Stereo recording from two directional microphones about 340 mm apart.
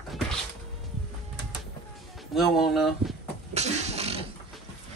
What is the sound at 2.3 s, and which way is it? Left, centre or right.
Speech, centre.